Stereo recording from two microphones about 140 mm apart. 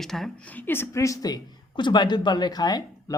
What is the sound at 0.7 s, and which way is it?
Speech, 20° left (ahead or behind).